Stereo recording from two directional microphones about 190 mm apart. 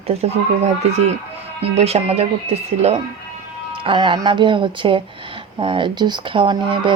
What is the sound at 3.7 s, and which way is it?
Speech, 25° right (ahead or behind).